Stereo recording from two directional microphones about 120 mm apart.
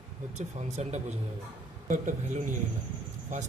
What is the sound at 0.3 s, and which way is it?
Speech, 70° right (ahead or behind).